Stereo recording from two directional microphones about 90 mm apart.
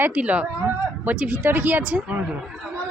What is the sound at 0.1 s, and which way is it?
Speech, 15° right (ahead or behind).